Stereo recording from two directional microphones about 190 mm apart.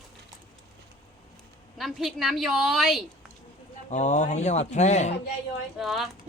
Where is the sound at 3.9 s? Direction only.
40° left (ahead or behind).